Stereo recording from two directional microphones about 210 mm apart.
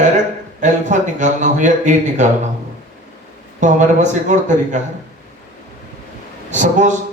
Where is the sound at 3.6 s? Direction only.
35° right (ahead or behind).